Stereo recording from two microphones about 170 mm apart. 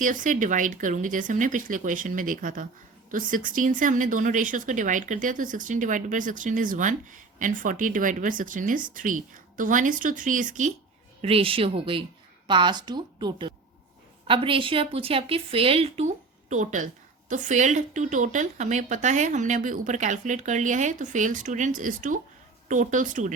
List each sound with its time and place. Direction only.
0.0 s a woman's voice: 50° right (ahead or behind)
11.2 s a woman's voice: 35° right (ahead or behind); by 23.3 s 50° right (ahead or behind)